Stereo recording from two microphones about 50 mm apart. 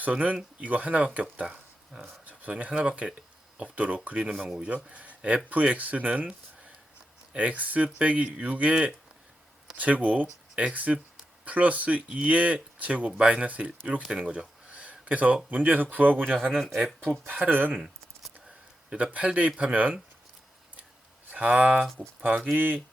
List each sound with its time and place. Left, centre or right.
0.1 s speech: right
1.5 s a sound: centre
2.5 s speech: right
4.2 s speech: centre
4.7 s speech: right
9.7 s speech: right
14.3 s a sound: right
15.4 s speech: right
16.6 s speech: centre
17.0 s speech: right
17.7 s a sound: centre
18.9 s speech: right
21.2 s speech: right
22.5 s speech: right